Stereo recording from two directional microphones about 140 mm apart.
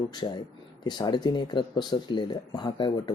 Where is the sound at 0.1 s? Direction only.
30° left (ahead or behind).